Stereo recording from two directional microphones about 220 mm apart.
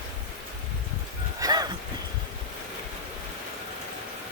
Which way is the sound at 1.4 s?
20° right (ahead or behind).